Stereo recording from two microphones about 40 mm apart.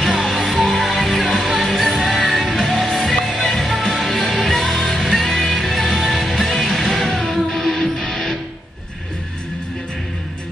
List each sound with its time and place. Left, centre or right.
0.1 s music: centre
7.8 s music: left